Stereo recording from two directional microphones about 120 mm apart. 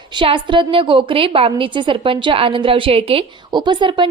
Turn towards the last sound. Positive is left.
turn(degrees=-40)  # may be behind; listen again after turning